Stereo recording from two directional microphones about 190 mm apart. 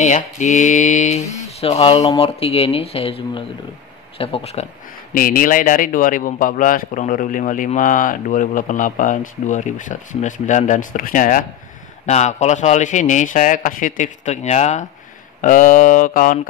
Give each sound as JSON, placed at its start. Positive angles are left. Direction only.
{"t": 0.0, "sound": "a man's voice", "side_deg": 40}
{"t": 5.1, "sound": "a man's voice", "side_deg": 45}